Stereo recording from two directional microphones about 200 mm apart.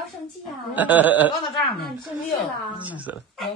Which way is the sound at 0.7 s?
10° right (ahead or behind).